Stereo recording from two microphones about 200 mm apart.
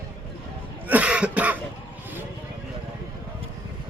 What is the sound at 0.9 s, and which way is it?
Cough, 5° right (ahead or behind).